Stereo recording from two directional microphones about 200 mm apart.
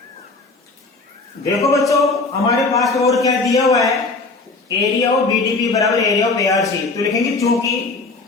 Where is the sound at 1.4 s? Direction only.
15° left (ahead or behind).